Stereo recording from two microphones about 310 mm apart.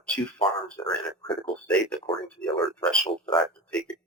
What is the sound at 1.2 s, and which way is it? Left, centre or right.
Speech, centre.